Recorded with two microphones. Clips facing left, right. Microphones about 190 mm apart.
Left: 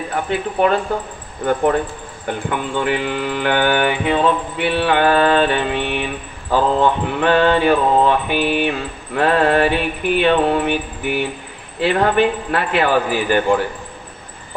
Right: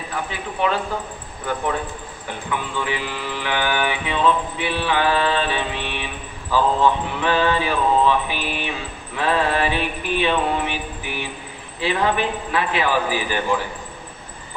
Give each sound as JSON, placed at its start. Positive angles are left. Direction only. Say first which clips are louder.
{"t": 0.1, "sound": "mantra", "louder": "left 7 dB", "side_deg": 55}